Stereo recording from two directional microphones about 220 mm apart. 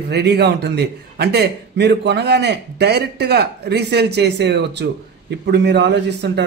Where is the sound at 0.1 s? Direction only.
50° right (ahead or behind).